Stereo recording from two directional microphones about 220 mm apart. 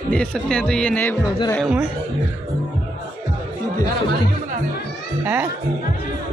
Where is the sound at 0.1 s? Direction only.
5° left (ahead or behind).